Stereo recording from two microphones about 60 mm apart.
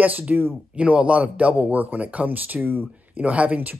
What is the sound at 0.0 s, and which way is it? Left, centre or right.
Speech, right.